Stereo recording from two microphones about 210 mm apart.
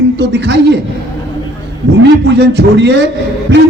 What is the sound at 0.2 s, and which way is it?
Speech, 55° right (ahead or behind).